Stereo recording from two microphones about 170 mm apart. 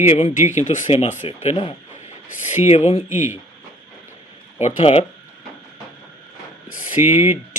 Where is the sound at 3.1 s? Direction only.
15° right (ahead or behind).